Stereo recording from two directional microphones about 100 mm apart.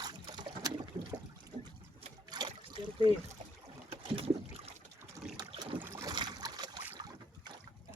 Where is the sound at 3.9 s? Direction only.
90° right.